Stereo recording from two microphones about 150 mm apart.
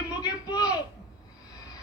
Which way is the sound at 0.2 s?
25° left (ahead or behind).